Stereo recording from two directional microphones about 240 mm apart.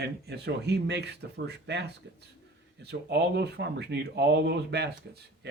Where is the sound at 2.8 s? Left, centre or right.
Right.